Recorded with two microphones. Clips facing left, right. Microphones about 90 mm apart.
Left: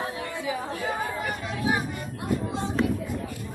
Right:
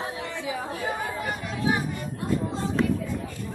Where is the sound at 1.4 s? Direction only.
20° left (ahead or behind).